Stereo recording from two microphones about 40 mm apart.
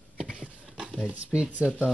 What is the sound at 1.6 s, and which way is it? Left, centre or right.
Speech, right.